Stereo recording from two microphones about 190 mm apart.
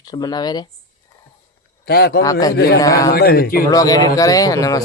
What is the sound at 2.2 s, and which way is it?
Speech, 15° left (ahead or behind).